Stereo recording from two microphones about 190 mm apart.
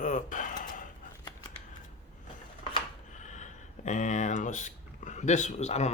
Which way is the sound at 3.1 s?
40° left (ahead or behind).